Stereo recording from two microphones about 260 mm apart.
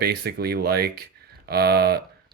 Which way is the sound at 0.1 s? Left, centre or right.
Right.